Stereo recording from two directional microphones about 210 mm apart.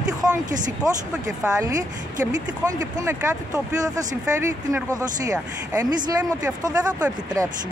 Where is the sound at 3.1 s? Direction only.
15° right (ahead or behind).